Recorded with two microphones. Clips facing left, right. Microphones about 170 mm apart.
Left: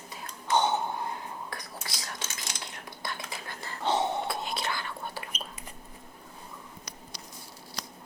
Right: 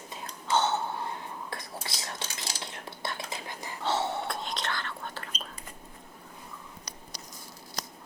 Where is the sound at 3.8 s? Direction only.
15° left (ahead or behind).